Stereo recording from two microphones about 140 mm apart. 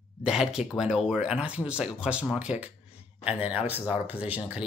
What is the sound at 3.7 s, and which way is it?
Speech, 10° right (ahead or behind).